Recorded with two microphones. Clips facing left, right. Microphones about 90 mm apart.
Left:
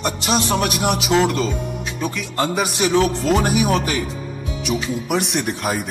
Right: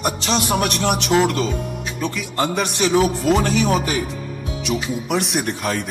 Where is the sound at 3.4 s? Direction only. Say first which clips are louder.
Even; 15° left (ahead or behind).